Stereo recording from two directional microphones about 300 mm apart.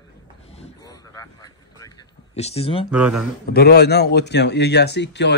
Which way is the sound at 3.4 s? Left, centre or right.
Left.